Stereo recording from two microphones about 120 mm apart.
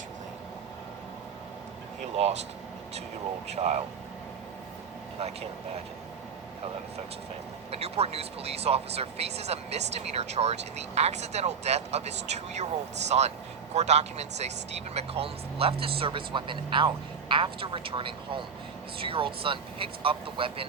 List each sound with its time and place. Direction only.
3.4 s speech: 65° right (ahead or behind)
7.7 s speech: 60° right (ahead or behind)